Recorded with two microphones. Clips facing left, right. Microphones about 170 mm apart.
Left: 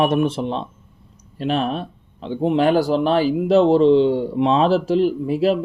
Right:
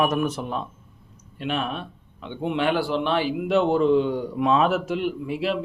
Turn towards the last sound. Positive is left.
turn(degrees=40)  # may be behind; listen again after turning